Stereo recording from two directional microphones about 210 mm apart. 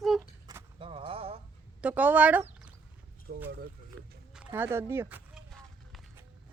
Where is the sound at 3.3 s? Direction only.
70° right (ahead or behind).